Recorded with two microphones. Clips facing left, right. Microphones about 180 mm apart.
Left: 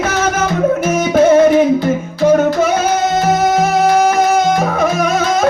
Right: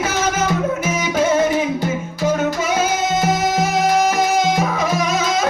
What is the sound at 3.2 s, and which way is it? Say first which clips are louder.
Music: left 5 dB; 55° left (ahead or behind).